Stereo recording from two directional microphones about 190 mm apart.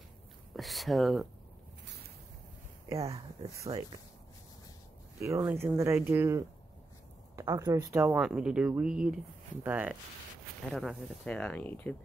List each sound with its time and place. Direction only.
0.6 s speech: centre (ahead or behind)
3.7 s speech: 35° right (ahead or behind)
5.2 s speech: 15° right (ahead or behind); by 11.9 s 10° left (ahead or behind)